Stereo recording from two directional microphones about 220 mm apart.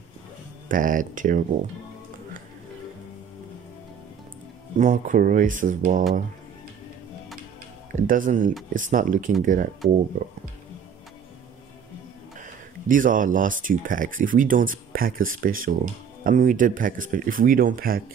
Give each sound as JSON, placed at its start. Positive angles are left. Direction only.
{"t": 0.7, "sound": "speech", "side_deg": -40}
{"t": 4.7, "sound": "speech", "side_deg": -35}
{"t": 7.9, "sound": "speech", "side_deg": -35}
{"t": 12.4, "sound": "speech", "side_deg": -35}